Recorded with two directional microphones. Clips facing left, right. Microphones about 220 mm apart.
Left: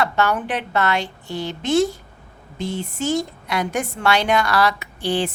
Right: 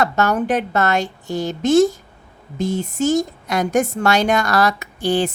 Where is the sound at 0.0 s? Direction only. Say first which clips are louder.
Right 3 dB; 45° right (ahead or behind).